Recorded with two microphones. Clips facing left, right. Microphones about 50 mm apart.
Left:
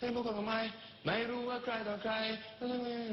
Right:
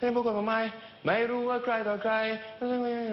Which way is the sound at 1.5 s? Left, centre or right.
Right.